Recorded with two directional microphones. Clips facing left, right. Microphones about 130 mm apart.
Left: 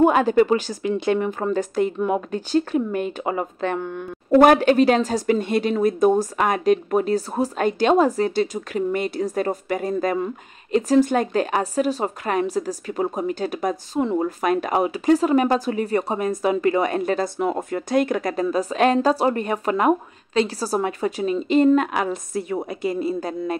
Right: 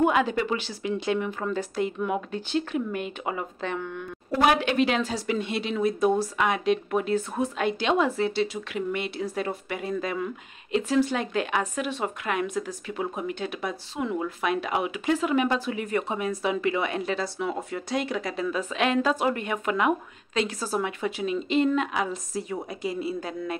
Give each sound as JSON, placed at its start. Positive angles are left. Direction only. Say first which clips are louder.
{"t": 0.0, "sound": "speech", "louder": "left 7 dB", "side_deg": 45}
{"t": 21.9, "sound": "a woman's voice", "louder": "left 5 dB", "side_deg": 60}